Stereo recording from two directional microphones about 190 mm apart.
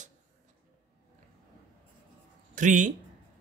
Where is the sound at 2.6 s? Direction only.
40° right (ahead or behind).